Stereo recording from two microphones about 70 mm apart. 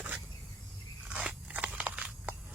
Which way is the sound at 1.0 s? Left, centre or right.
Right.